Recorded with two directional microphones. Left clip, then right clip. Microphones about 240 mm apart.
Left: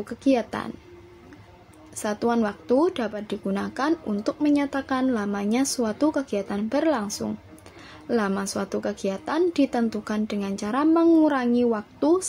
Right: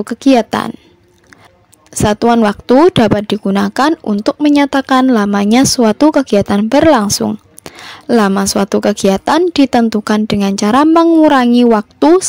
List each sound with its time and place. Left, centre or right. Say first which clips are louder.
0.0 s a woman's voice: right 13 dB; right
2.0 s a woman's voice: right 14 dB; right